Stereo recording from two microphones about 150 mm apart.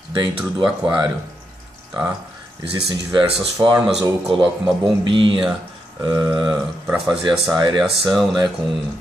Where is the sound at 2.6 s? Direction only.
35° right (ahead or behind).